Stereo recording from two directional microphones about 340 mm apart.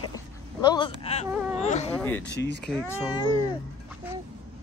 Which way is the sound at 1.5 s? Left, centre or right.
Centre.